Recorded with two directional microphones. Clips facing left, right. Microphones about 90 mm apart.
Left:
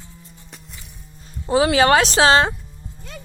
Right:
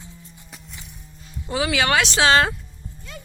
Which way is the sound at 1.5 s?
35° left (ahead or behind).